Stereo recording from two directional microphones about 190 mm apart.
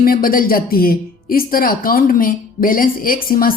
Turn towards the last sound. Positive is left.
turn(degrees=50)  # may be behind; listen again after turning